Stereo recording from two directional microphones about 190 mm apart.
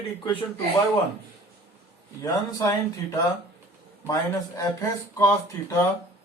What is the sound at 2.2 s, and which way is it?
Speech, 15° left (ahead or behind).